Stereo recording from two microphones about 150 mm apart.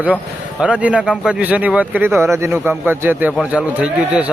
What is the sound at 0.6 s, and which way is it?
A man's voice, 10° right (ahead or behind).